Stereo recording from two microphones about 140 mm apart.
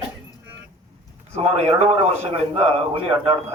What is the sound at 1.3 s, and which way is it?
A man's voice, 45° right (ahead or behind).